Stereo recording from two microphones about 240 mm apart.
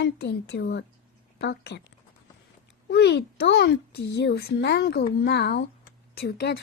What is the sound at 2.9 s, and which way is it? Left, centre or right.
A woman's voice, left.